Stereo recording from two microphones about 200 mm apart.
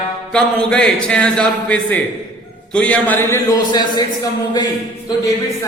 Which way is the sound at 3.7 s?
20° left (ahead or behind).